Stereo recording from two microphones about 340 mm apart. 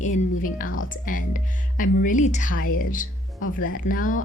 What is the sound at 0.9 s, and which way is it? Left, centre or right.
Speech, left.